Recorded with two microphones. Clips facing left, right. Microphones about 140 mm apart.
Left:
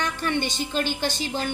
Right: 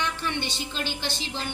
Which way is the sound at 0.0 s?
45° left (ahead or behind).